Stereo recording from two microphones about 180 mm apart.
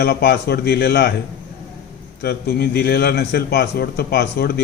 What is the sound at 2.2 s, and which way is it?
A man's voice, 60° left (ahead or behind).